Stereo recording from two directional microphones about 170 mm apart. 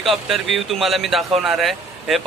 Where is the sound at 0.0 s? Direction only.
Centre (ahead or behind).